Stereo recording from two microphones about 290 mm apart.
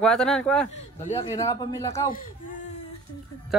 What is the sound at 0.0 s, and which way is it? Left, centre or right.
Speech, centre.